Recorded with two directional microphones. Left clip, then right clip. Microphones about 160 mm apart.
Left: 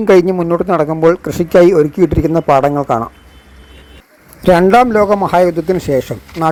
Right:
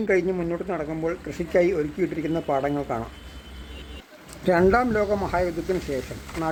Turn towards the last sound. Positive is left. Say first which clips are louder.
# left 13 dB
turn(degrees=40)  # may be behind; listen again after turning